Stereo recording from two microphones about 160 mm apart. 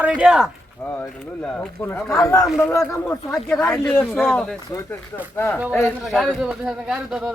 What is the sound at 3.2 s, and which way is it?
Speech, 5° left (ahead or behind).